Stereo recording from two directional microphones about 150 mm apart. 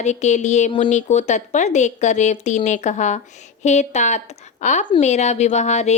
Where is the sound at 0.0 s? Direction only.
50° left (ahead or behind).